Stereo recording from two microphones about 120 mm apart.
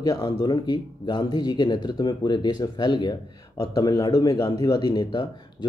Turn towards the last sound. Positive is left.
turn(degrees=40)  # may be behind; listen again after turning